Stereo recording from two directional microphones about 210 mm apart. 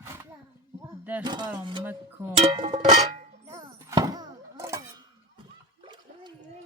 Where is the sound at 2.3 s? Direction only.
25° right (ahead or behind).